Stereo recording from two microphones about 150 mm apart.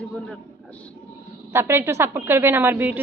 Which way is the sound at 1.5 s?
15° right (ahead or behind).